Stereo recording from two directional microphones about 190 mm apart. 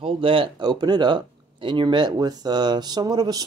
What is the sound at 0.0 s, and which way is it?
Speech, 30° right (ahead or behind).